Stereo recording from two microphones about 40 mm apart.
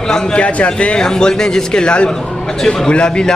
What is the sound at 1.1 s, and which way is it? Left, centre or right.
A man's voice, centre.